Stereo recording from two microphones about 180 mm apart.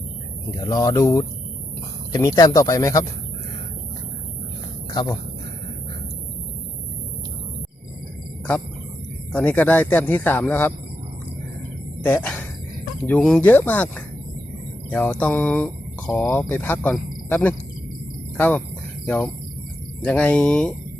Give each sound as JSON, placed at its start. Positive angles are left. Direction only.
{"t": 0.6, "sound": "speech", "side_deg": 20}
{"t": 9.3, "sound": "speech", "side_deg": 10}
{"t": 12.0, "sound": "speech", "side_deg": 10}